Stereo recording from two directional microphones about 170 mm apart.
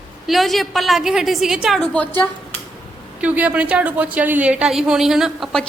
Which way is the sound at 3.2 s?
10° right (ahead or behind).